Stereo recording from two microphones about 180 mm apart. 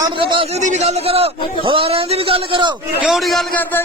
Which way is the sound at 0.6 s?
40° right (ahead or behind).